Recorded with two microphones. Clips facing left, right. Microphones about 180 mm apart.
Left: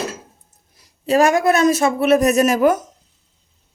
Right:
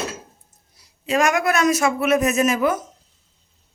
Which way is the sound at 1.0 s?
35° left (ahead or behind).